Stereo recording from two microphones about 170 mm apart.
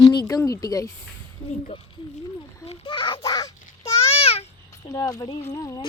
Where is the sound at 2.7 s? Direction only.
30° left (ahead or behind).